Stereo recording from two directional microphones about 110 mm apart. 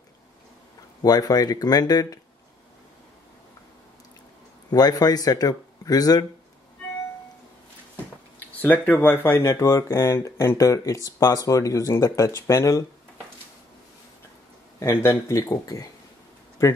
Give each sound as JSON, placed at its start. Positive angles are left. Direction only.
{"t": 1.0, "sound": "speech", "side_deg": 35}
{"t": 4.6, "sound": "speech", "side_deg": 35}
{"t": 8.5, "sound": "speech", "side_deg": 15}
{"t": 14.8, "sound": "speech", "side_deg": 20}